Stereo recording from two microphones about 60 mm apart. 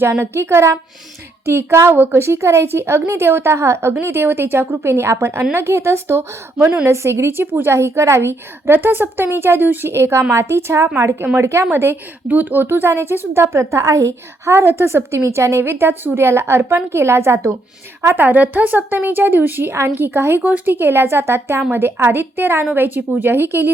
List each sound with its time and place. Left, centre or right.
0.2 s a woman's voice: right
7.8 s a woman's voice: right
11.6 s a woman's voice: right
14.6 s a woman's voice: right
18.2 s a woman's voice: right